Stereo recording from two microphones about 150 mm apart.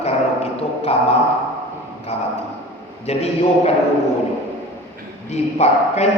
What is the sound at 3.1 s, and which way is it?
Speech, 45° left (ahead or behind).